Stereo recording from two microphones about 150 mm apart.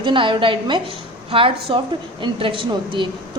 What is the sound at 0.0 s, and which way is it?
A woman's voice, 35° right (ahead or behind).